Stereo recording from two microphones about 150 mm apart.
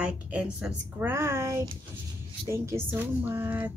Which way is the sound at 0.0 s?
5° right (ahead or behind).